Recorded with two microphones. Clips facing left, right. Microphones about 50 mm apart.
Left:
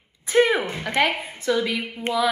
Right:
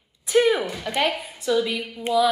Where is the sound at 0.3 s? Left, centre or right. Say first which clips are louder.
Even; left.